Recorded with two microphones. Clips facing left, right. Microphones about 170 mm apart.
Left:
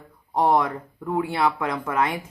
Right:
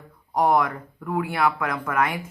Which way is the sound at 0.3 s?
30° left (ahead or behind).